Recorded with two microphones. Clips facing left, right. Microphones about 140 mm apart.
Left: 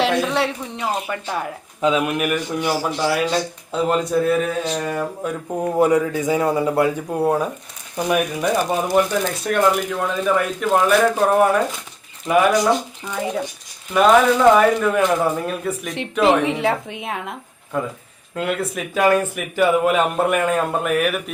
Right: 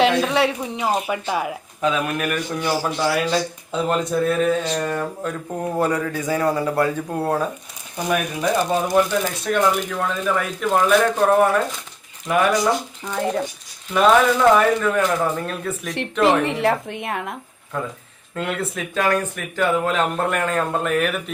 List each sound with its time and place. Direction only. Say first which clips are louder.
0.0 s a sound: right 2 dB; centre (ahead or behind)
0.9 s speech: right 2 dB; 15° right (ahead or behind)
1.8 s speech: left 3 dB; 20° left (ahead or behind)
9.5 s speech: left 2 dB; 5° left (ahead or behind)
19.0 s speech: left 6 dB; 15° left (ahead or behind)